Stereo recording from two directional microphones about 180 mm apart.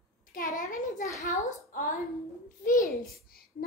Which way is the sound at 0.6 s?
45° left (ahead or behind).